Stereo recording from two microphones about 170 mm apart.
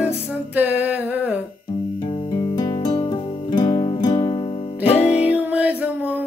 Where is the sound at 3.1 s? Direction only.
30° left (ahead or behind).